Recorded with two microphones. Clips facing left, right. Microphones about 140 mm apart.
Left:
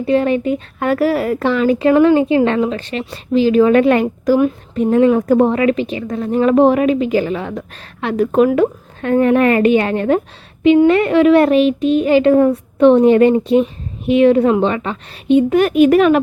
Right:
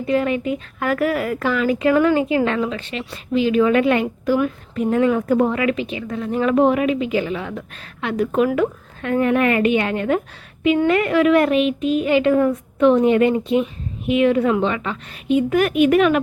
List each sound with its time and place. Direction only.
0.0 s a woman's voice: 30° left (ahead or behind)
4.4 s a woman's voice: 30° left (ahead or behind)